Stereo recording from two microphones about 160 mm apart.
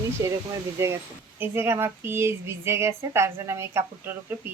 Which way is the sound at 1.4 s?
15° right (ahead or behind).